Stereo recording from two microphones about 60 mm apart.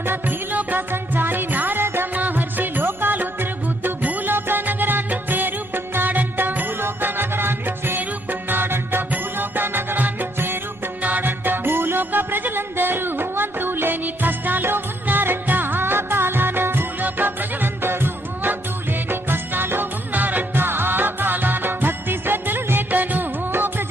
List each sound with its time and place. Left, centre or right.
0.0 s music: right